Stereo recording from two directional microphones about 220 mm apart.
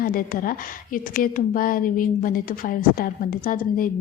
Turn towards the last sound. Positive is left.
turn(degrees=40)  # may be behind; listen again after turning